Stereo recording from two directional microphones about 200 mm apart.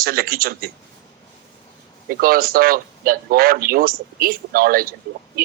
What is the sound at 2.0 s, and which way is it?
A man's voice, 45° right (ahead or behind).